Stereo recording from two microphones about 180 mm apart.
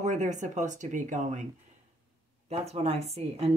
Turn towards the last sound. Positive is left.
turn(degrees=-35)  # may be behind; listen again after turning